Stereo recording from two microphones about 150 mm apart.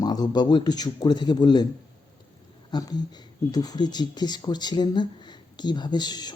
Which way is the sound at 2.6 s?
25° left (ahead or behind).